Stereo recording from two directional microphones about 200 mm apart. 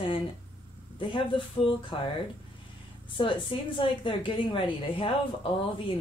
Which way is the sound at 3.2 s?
25° left (ahead or behind).